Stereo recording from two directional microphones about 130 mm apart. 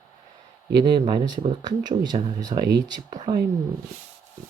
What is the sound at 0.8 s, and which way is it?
Speech, 35° right (ahead or behind).